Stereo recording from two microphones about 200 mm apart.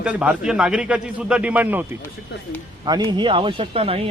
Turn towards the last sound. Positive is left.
turn(degrees=-30)  # may be behind; listen again after turning